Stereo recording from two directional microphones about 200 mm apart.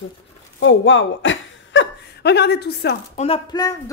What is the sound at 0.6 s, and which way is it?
A woman's voice, 70° left (ahead or behind).